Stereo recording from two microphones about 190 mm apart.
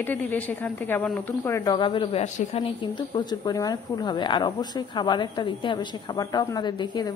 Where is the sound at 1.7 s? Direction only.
25° left (ahead or behind).